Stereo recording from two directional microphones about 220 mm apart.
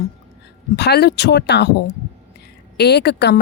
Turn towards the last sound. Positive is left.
turn(degrees=50)  # may be behind; listen again after turning